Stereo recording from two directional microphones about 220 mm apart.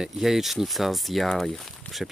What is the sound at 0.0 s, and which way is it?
Speech, centre (ahead or behind).